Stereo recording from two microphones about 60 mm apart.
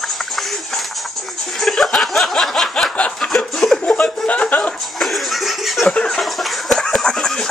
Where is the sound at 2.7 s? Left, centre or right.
Centre.